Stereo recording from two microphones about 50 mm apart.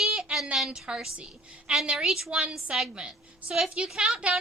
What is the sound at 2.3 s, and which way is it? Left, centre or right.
Speech, right.